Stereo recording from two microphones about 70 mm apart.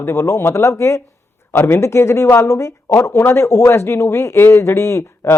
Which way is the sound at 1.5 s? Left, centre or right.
Left.